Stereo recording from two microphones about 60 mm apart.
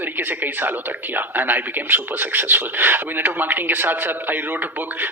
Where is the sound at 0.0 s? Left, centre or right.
Right.